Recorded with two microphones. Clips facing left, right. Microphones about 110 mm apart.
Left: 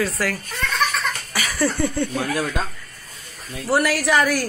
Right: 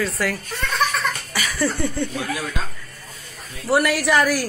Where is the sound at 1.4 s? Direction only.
15° left (ahead or behind).